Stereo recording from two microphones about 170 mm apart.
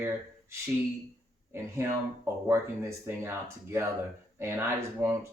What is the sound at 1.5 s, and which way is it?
Speech, 15° right (ahead or behind).